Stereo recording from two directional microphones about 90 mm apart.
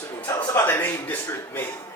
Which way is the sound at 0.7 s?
20° left (ahead or behind).